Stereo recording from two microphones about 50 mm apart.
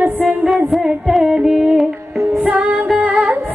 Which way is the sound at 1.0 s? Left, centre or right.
Centre.